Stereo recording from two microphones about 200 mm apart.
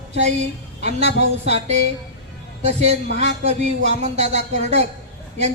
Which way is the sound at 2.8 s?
35° right (ahead or behind).